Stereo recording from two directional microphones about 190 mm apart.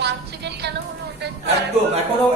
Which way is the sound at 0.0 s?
60° right (ahead or behind).